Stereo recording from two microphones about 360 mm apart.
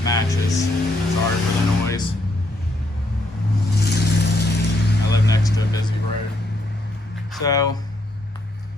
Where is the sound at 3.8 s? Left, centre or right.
Left.